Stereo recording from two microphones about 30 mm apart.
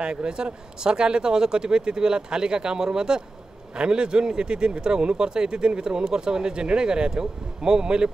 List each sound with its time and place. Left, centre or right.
0.0 s a man's voice: right